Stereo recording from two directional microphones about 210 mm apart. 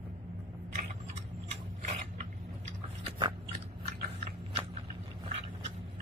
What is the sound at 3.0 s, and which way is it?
Biting, 25° right (ahead or behind).